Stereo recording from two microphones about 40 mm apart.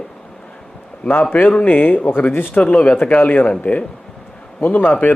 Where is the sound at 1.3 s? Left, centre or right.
Left.